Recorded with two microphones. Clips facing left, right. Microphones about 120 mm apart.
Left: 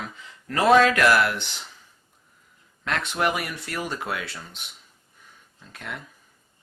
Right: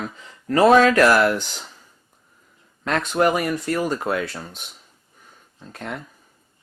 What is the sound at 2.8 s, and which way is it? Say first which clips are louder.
Speech: right 6 dB; 40° right (ahead or behind).